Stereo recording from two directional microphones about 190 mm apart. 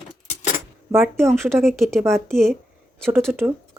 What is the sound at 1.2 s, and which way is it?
Speech, centre (ahead or behind).